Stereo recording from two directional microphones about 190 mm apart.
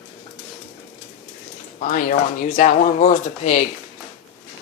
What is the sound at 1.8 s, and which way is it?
Speech, 45° left (ahead or behind).